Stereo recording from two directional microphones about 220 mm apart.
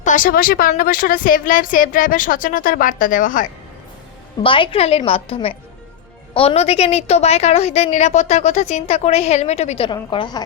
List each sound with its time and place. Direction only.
0.0 s a woman's voice: 35° left (ahead or behind)
4.4 s a woman's voice: 25° left (ahead or behind)